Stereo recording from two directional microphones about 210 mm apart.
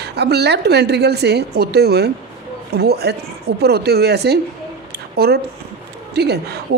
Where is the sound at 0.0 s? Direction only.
50° right (ahead or behind).